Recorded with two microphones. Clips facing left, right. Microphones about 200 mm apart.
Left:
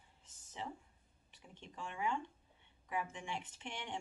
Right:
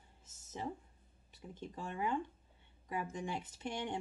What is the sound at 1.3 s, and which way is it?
A woman's voice, 40° right (ahead or behind).